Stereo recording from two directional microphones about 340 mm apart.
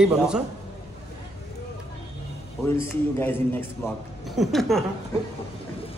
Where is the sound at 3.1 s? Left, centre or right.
Centre.